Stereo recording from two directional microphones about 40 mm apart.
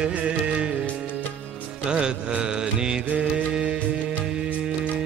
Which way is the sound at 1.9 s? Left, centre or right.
Right.